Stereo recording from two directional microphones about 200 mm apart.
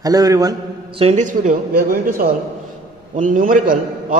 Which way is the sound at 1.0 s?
35° right (ahead or behind).